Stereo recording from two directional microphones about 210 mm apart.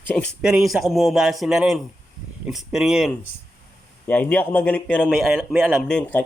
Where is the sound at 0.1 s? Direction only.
5° left (ahead or behind).